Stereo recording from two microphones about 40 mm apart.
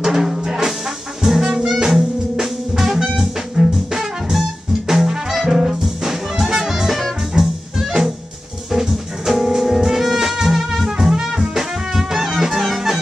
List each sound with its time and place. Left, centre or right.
0.0 s brass instrument: centre
1.2 s music: centre
8.7 s music: centre
11.0 s brass instrument: centre